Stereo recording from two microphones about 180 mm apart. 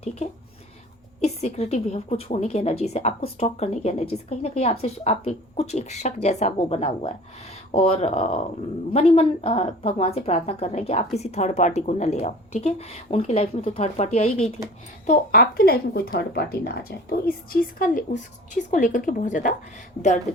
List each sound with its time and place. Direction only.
0.0 s a woman's voice: 40° left (ahead or behind)
15.0 s a woman's voice: 50° left (ahead or behind)